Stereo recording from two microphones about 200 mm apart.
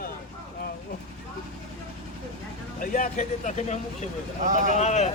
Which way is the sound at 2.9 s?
40° left (ahead or behind).